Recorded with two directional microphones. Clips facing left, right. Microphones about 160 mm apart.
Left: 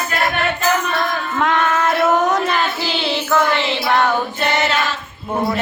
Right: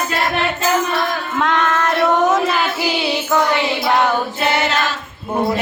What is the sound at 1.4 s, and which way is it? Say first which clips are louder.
Child singing: even; centre (ahead or behind).